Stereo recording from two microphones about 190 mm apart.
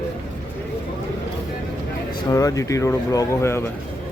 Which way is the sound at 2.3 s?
15° left (ahead or behind).